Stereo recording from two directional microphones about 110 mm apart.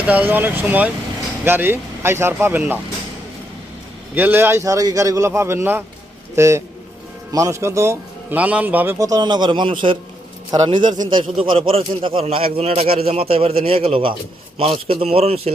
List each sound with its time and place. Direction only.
0.0 s a man's voice: 15° right (ahead or behind)
4.1 s a man's voice: 15° right (ahead or behind)
9.0 s a man's voice: 35° right (ahead or behind)
11.3 s a man's voice: 55° right (ahead or behind)